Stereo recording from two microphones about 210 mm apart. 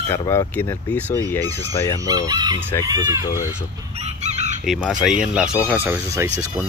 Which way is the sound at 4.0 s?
30° right (ahead or behind).